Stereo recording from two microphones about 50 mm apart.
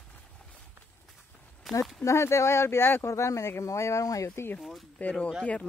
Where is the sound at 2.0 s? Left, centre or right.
Left.